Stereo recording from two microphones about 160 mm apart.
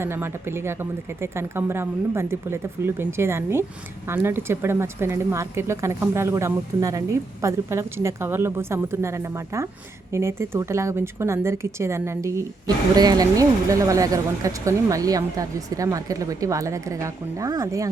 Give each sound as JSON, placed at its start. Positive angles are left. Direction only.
{"t": 0.0, "sound": "speech", "side_deg": -15}